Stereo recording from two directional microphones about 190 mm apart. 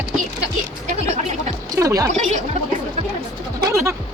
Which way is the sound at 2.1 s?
35° right (ahead or behind).